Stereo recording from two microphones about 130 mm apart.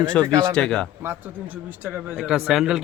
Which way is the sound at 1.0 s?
15° right (ahead or behind).